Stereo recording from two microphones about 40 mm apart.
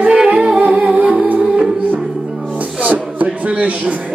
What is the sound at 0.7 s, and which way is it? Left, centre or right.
Music, right.